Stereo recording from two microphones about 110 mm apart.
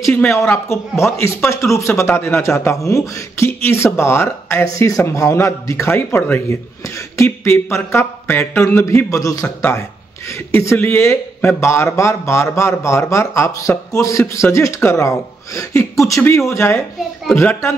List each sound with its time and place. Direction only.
0.3 s a man's voice: 25° left (ahead or behind)